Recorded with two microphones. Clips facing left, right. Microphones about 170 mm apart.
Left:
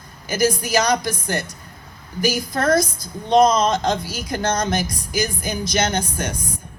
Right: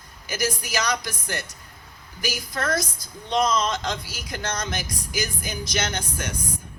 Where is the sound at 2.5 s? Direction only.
55° left (ahead or behind).